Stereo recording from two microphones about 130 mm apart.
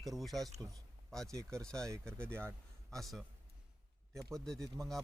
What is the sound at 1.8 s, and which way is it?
Speech, 20° right (ahead or behind).